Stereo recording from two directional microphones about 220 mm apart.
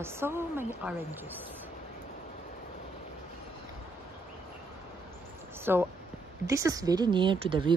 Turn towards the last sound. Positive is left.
turn(degrees=-20)  # may be behind; listen again after turning